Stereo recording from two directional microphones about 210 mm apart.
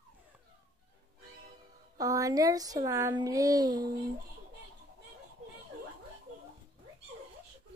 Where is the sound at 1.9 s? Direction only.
15° right (ahead or behind).